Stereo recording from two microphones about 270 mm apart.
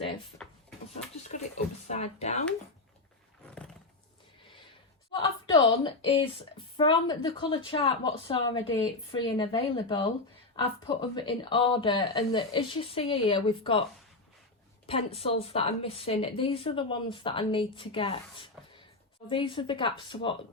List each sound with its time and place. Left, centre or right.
1.3 s a sound: left
5.5 s a woman's voice: centre
14.8 s a woman's voice: left